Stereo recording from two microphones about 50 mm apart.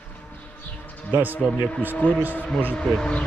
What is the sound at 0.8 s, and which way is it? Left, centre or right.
Basketball bounce, left.